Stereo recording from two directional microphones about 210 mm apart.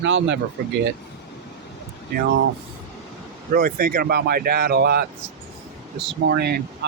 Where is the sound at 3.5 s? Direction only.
45° right (ahead or behind).